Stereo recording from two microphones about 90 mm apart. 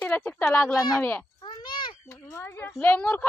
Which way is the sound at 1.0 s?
20° left (ahead or behind).